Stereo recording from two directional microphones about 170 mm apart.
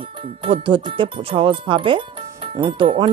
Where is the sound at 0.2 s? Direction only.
30° right (ahead or behind).